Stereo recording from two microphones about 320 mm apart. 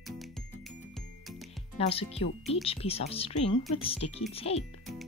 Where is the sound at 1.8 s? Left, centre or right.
Centre.